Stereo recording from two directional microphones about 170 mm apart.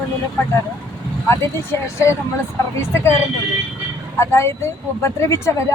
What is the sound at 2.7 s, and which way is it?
Speech, 15° left (ahead or behind).